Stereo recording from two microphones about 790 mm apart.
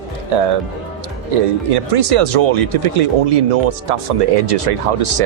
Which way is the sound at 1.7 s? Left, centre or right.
Right.